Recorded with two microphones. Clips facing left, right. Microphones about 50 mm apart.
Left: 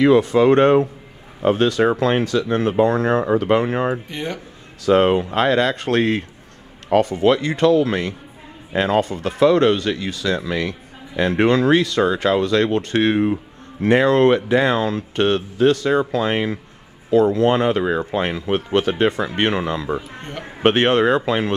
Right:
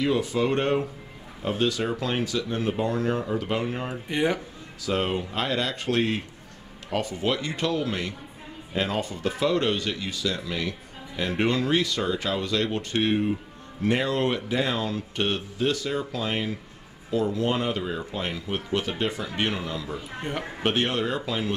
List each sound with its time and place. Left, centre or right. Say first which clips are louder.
0.2 s speech: left 11 dB; left
4.1 s speech: right 3 dB; centre
4.8 s speech: left 11 dB; left
13.8 s speech: left 10 dB; left
18.2 s speech: left 9 dB; left